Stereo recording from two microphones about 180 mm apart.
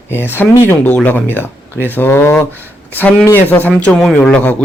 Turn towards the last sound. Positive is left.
turn(degrees=5)  # may be behind; listen again after turning